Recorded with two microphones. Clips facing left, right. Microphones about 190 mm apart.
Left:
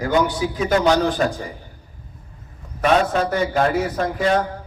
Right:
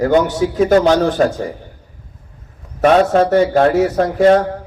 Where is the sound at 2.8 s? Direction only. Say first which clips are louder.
Right 7 dB; 40° right (ahead or behind).